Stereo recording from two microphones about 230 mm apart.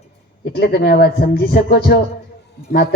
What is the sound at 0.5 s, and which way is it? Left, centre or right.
A man's voice, left.